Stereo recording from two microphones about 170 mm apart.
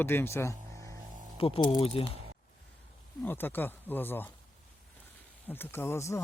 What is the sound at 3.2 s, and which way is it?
Speech, 10° left (ahead or behind).